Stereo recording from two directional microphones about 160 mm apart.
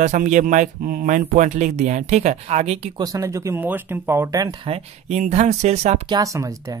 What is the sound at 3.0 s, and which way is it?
Speech, 20° right (ahead or behind).